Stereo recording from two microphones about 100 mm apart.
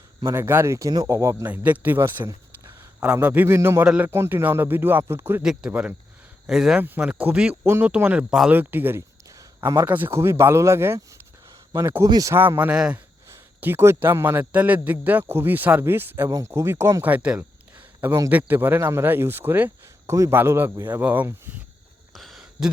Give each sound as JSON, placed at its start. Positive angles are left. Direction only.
{"t": 0.3, "sound": "speech", "side_deg": -25}
{"t": 1.5, "sound": "speech", "side_deg": -15}
{"t": 3.8, "sound": "speech", "side_deg": -15}
{"t": 4.1, "sound": "speech", "side_deg": -25}
{"t": 5.4, "sound": "speech", "side_deg": -10}
{"t": 12.0, "sound": "speech", "side_deg": -40}
{"t": 12.3, "sound": "speech", "side_deg": -20}
{"t": 13.6, "sound": "speech", "side_deg": -25}
{"t": 21.0, "sound": "speech", "side_deg": -20}
{"t": 22.1, "sound": "a sound", "side_deg": 0}